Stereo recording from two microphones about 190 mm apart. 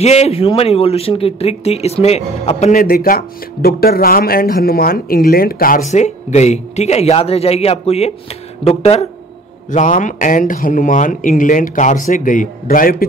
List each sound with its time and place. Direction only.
0.0 s speech: 35° left (ahead or behind)
2.8 s speech: 50° left (ahead or behind); by 9.0 s 30° left (ahead or behind)
9.7 s speech: 40° left (ahead or behind)